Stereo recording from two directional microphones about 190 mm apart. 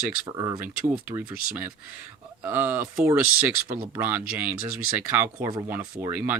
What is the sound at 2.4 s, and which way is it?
Speech, 10° right (ahead or behind).